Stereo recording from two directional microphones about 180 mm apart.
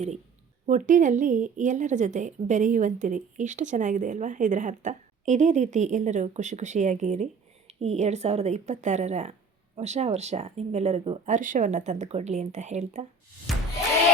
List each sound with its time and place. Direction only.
0.7 s a woman's voice: 45° right (ahead or behind)
11.3 s a woman's voice: 45° right (ahead or behind)
13.5 s a sound: centre (ahead or behind)